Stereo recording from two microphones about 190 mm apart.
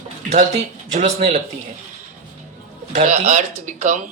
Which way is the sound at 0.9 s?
35° right (ahead or behind).